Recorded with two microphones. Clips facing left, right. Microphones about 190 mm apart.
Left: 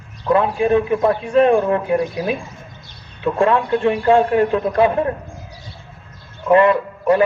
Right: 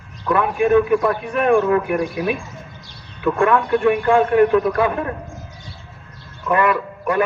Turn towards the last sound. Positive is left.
turn(degrees=25)  # may be behind; listen again after turning